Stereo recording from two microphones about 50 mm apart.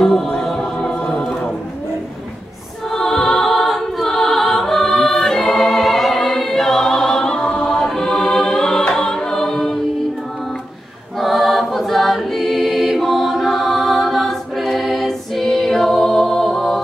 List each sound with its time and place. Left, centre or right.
0.0 s choir: centre
2.9 s music: centre
5.5 s choir: centre
11.1 s choir: centre